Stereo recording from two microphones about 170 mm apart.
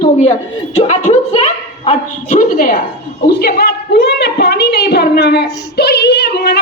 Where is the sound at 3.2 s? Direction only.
70° left (ahead or behind).